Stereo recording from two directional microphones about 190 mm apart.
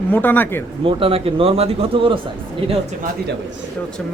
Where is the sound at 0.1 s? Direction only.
10° left (ahead or behind).